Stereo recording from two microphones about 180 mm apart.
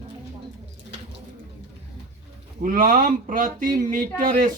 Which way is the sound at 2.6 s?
50° right (ahead or behind).